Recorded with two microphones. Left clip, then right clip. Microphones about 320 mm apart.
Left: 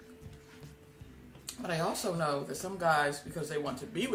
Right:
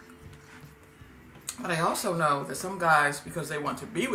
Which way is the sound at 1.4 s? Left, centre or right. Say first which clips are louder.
Right 5 dB; left.